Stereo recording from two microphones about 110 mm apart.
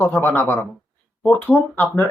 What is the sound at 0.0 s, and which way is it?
Speech, 20° left (ahead or behind).